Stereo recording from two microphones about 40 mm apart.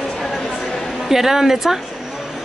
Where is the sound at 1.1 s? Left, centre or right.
Centre.